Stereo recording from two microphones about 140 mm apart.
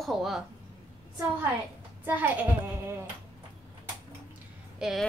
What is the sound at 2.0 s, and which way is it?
Speech, 10° right (ahead or behind).